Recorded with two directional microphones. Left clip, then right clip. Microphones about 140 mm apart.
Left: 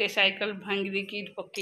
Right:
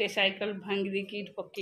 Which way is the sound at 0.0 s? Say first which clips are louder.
Left 3 dB; 5° left (ahead or behind).